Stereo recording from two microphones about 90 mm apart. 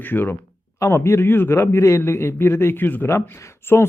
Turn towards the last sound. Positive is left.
turn(degrees=30)  # may be behind; listen again after turning